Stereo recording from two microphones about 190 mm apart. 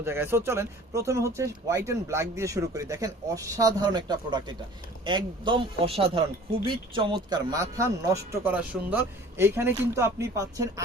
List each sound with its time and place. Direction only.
0.0 s a man's voice: 10° right (ahead or behind)